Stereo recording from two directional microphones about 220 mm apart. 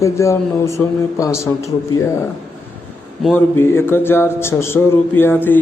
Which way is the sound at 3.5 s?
10° left (ahead or behind).